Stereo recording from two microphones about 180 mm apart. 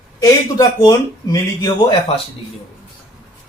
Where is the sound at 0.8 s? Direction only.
20° left (ahead or behind).